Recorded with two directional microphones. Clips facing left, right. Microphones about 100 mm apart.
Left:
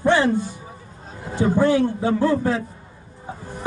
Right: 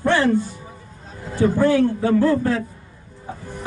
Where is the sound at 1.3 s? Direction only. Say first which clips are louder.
Right 1 dB; 20° left (ahead or behind).